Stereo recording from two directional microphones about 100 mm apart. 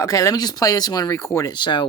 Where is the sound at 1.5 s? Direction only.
50° left (ahead or behind).